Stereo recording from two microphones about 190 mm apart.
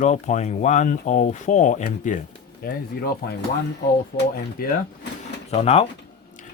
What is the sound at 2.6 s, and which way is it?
Speech, 50° left (ahead or behind).